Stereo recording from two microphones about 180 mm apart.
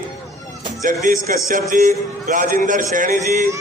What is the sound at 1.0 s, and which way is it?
Music, 50° right (ahead or behind).